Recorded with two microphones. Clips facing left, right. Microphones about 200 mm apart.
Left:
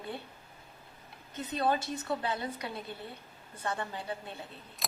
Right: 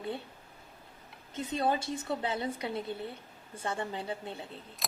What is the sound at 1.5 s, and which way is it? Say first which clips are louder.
A woman's voice: even; 25° right (ahead or behind).